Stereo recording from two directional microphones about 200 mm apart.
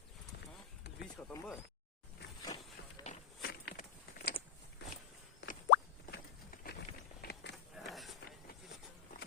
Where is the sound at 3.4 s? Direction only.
55° left (ahead or behind).